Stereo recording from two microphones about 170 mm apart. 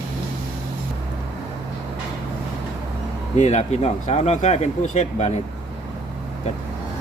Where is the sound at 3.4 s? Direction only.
40° left (ahead or behind).